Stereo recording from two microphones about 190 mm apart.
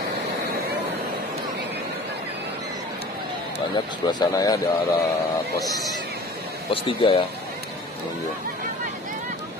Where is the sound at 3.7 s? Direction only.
20° left (ahead or behind).